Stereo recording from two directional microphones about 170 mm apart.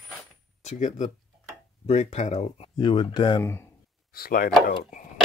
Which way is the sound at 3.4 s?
15° left (ahead or behind).